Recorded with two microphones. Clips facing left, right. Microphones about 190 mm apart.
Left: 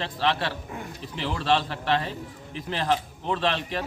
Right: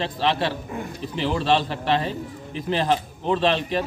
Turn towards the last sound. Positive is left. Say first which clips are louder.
# right 5 dB
turn(degrees=-25)  # may be behind; listen again after turning